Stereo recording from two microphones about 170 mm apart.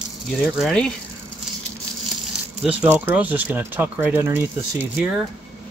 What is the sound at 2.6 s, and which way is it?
Speech, 10° right (ahead or behind).